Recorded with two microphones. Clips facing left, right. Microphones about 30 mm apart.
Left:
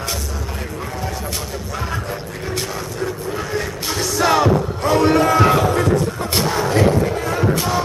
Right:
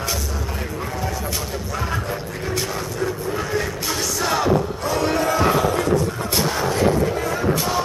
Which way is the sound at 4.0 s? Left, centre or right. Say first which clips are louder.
Left 6 dB; left.